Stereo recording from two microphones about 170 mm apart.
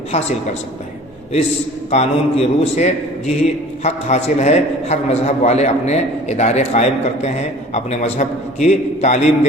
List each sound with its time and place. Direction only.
1.9 s a man's voice: 40° left (ahead or behind)